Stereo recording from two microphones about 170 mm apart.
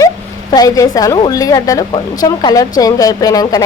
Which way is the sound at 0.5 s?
20° left (ahead or behind).